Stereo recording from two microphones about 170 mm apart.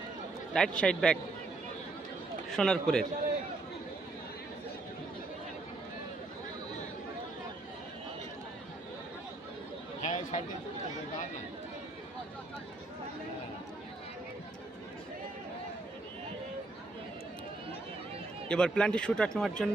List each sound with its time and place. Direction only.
0.5 s speech: 5° left (ahead or behind)
2.5 s speech: centre (ahead or behind)
10.0 s a sound: 45° left (ahead or behind)
18.4 s speech: 5° left (ahead or behind)